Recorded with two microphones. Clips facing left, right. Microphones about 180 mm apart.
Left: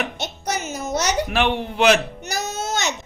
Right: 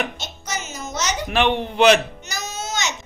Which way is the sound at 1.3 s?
5° left (ahead or behind).